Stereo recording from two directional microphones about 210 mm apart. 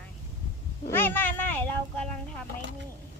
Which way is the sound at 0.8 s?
10° left (ahead or behind).